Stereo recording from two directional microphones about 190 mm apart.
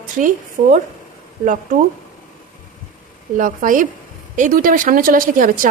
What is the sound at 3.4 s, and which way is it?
Speech, 45° right (ahead or behind).